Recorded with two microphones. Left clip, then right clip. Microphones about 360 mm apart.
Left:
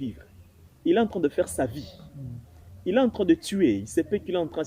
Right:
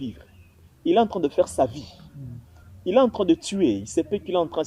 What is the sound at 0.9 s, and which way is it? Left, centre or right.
Speech, centre.